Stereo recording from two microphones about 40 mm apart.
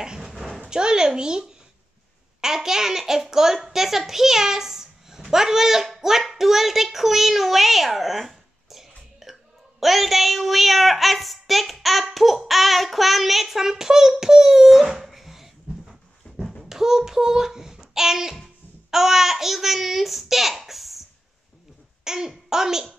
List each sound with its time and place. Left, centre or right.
0.0 s dog: centre
0.7 s a child's voice: centre
16.6 s a sound: centre
18.9 s a child's voice: centre
22.0 s a child's voice: centre